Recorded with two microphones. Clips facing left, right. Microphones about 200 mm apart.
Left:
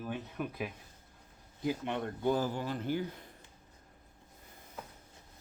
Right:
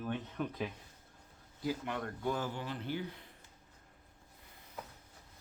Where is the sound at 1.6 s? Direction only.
20° left (ahead or behind); by 3.3 s 45° left (ahead or behind).